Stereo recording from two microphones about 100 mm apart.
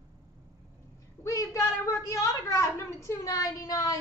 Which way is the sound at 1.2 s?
35° left (ahead or behind).